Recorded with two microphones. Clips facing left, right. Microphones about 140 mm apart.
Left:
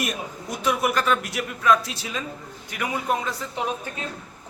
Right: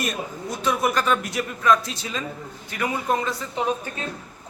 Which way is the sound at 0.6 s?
10° left (ahead or behind).